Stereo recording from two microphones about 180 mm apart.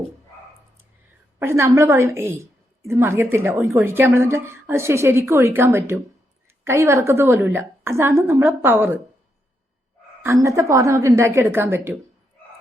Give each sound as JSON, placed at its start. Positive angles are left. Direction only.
{"t": 1.4, "sound": "a woman's voice", "side_deg": -15}
{"t": 10.2, "sound": "a woman's voice", "side_deg": -15}